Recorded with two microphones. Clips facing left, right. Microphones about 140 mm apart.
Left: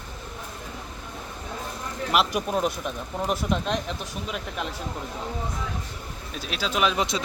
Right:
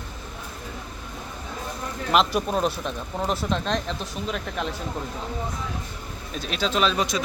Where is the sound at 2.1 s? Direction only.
5° left (ahead or behind).